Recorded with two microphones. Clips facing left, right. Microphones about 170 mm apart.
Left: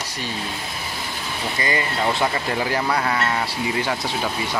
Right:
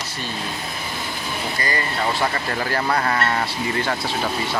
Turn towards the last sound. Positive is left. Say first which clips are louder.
# even
turn(degrees=10)  # may be behind; listen again after turning